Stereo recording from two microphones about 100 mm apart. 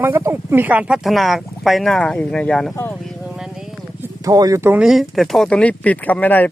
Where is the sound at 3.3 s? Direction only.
5° right (ahead or behind).